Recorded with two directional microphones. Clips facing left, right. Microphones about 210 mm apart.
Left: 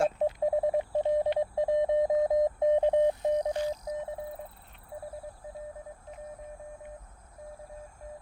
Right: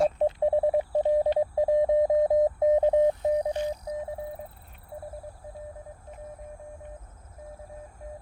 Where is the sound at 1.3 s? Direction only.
35° right (ahead or behind).